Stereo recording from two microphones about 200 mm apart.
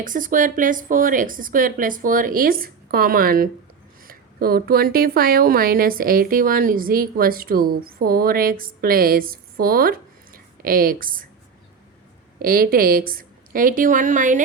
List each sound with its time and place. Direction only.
0.0 s speech: 40° right (ahead or behind)
12.4 s speech: 45° right (ahead or behind)